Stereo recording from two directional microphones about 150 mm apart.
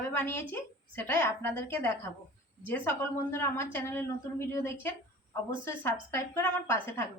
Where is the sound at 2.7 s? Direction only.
15° left (ahead or behind).